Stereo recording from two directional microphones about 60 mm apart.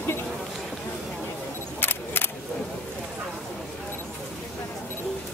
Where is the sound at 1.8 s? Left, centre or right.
Left.